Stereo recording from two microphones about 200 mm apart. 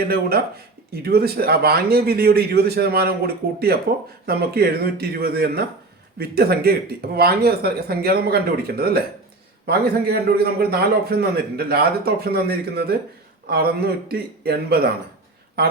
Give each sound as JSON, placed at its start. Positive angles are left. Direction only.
{"t": 0.1, "sound": "speech", "side_deg": -50}